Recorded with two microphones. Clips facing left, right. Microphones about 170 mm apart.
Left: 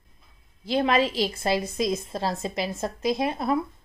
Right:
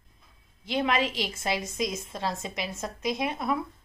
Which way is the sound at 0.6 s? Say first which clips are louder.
Left 4 dB; 35° left (ahead or behind).